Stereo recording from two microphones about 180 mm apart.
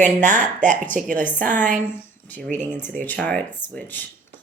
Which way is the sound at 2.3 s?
10° left (ahead or behind).